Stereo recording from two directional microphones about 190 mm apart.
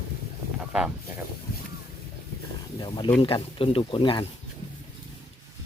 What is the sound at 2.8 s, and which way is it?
Speech, 25° left (ahead or behind).